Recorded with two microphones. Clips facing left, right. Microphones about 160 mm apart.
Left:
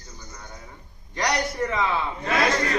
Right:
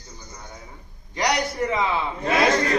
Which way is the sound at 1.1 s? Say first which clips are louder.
Right 2 dB; 10° right (ahead or behind).